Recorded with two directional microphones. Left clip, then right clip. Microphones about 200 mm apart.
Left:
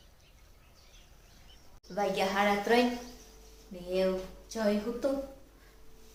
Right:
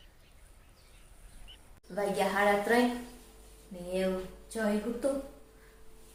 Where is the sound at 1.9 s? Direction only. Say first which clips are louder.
Even; centre (ahead or behind).